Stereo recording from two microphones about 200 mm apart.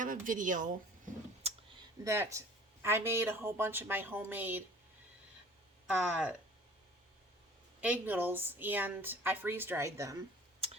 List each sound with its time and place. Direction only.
0.0 s a sound: 40° right (ahead or behind)
2.0 s a woman's voice: 15° right (ahead or behind)
5.9 s a woman's voice: 5° right (ahead or behind)
7.8 s a woman's voice: 5° right (ahead or behind)